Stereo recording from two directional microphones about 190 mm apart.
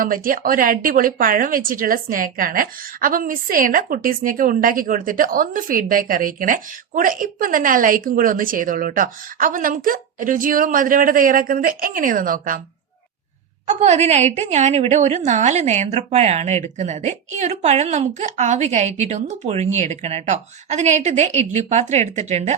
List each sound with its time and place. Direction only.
0.0 s speech: 45° right (ahead or behind)
13.7 s a woman's voice: 35° right (ahead or behind)